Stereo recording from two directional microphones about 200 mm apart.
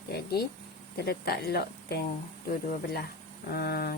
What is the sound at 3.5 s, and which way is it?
Speech, 50° left (ahead or behind).